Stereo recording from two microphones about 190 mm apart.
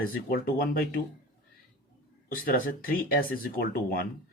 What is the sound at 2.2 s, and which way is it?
Speech, 50° left (ahead or behind).